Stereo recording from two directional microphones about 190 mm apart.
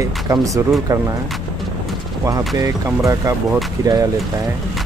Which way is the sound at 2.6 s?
15° right (ahead or behind).